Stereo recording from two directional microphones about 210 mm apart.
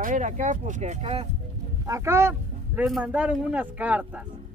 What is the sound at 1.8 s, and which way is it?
Speech, 15° right (ahead or behind).